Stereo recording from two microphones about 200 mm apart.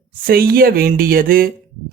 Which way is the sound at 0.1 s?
45° right (ahead or behind).